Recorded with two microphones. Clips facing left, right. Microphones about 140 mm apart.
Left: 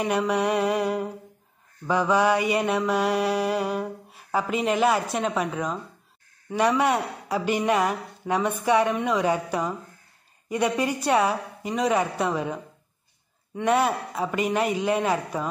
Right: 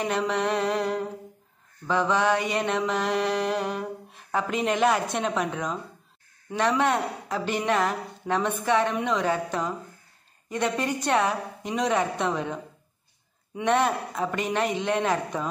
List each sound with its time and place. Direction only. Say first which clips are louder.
0.0 s mantra: left 2 dB; 10° left (ahead or behind)
6.8 s mantra: left 1 dB; 10° left (ahead or behind)
13.6 s mantra: left 1 dB; 5° left (ahead or behind)